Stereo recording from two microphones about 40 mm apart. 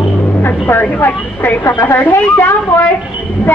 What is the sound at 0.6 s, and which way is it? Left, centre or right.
Speech, left.